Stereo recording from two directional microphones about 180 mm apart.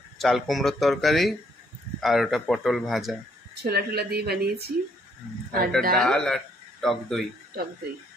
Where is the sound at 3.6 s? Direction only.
60° right (ahead or behind).